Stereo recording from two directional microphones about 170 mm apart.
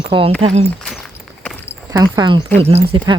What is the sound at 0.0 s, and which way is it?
Speech, 30° right (ahead or behind).